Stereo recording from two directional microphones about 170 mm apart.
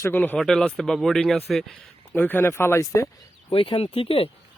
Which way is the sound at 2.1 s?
10° left (ahead or behind).